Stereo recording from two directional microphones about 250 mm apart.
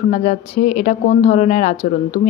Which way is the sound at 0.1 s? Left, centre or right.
Left.